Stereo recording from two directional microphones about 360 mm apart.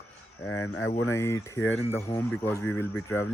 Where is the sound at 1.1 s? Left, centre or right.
Centre.